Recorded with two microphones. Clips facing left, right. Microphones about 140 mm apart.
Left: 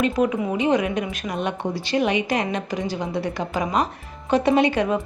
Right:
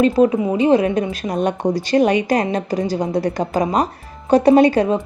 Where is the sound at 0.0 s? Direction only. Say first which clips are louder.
Right 7 dB; 35° right (ahead or behind).